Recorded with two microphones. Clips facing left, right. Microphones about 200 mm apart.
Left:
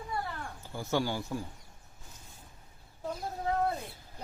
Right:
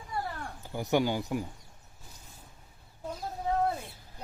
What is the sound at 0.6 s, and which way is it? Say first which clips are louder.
Speech: right 4 dB; 15° right (ahead or behind).